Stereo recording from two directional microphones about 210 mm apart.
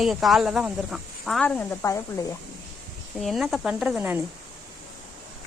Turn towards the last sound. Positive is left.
turn(degrees=-10)  # may be behind; listen again after turning